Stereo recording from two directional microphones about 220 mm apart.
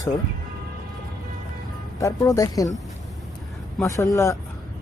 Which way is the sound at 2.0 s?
15° left (ahead or behind).